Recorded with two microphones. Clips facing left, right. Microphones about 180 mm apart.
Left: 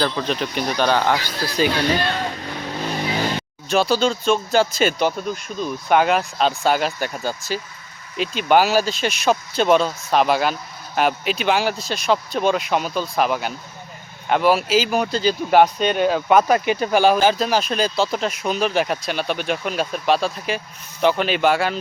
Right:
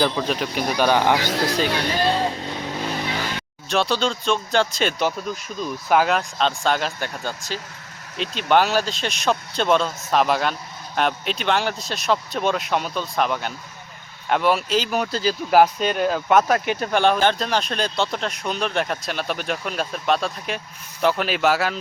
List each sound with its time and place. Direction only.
0.0 s speech: 5° right (ahead or behind)
1.3 s speech: 75° right (ahead or behind)
2.0 s music: 30° right (ahead or behind)
3.7 s speech: centre (ahead or behind)